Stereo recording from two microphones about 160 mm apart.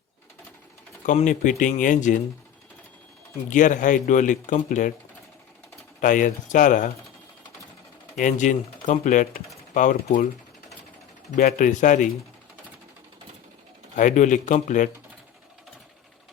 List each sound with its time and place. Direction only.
1.0 s speech: 50° left (ahead or behind)
3.5 s speech: 55° left (ahead or behind)
6.0 s speech: 55° left (ahead or behind)
8.2 s speech: 55° left (ahead or behind)
11.3 s speech: 55° left (ahead or behind)
13.9 s speech: 50° left (ahead or behind)